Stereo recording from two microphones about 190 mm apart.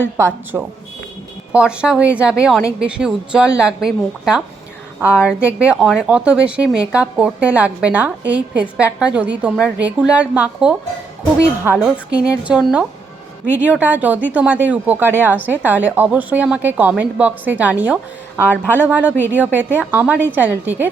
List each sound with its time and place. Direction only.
0.2 s a woman's voice: 15° right (ahead or behind)